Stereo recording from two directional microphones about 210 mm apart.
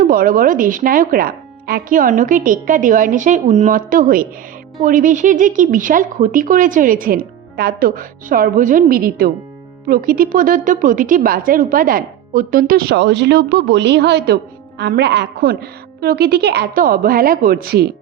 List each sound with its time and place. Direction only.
0.0 s a woman's voice: 40° right (ahead or behind)